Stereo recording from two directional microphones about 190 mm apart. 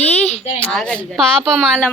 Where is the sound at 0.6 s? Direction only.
5° left (ahead or behind).